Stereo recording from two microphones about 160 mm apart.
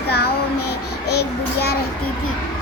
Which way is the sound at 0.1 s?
85° left.